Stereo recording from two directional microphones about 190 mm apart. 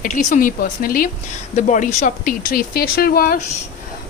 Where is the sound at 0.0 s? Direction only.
40° left (ahead or behind).